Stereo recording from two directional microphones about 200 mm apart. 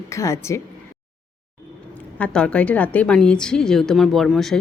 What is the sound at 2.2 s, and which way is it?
A woman's voice, 5° left (ahead or behind).